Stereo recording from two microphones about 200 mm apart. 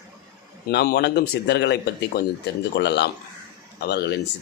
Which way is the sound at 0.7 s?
55° left (ahead or behind).